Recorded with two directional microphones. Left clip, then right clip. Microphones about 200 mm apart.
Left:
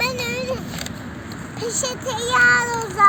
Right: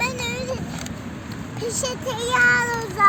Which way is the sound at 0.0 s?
35° left (ahead or behind).